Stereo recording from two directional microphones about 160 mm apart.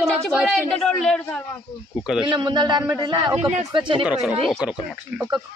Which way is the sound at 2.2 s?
30° right (ahead or behind).